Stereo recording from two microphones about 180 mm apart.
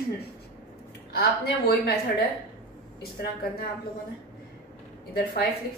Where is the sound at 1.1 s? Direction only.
60° left (ahead or behind).